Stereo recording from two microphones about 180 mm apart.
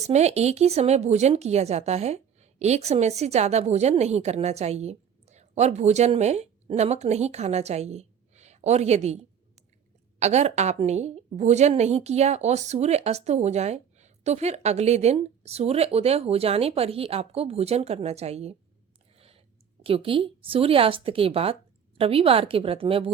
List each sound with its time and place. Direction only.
0.1 s speech: 40° right (ahead or behind)
10.2 s speech: 40° right (ahead or behind)
19.1 s a sound: 35° right (ahead or behind)
19.8 s speech: 30° right (ahead or behind)